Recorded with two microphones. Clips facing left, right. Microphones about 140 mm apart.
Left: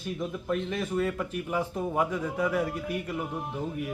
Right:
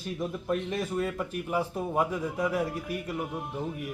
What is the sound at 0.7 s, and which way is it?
A man's voice, 10° right (ahead or behind).